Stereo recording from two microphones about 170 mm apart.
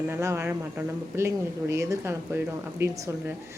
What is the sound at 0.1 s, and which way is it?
A woman's voice, 15° right (ahead or behind).